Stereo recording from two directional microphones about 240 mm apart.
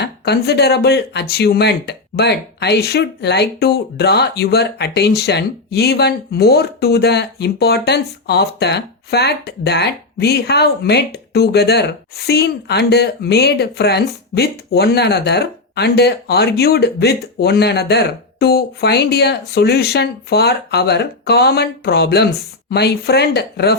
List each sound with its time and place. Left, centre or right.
0.0 s speech: left